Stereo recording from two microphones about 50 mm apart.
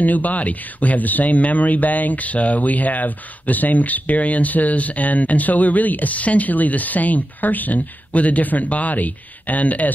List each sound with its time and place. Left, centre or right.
0.0 s speech: left